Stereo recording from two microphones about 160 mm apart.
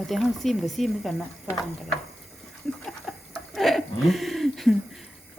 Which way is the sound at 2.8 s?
5° left (ahead or behind).